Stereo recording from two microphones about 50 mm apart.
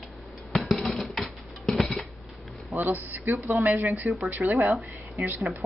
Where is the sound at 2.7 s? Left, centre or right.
Right.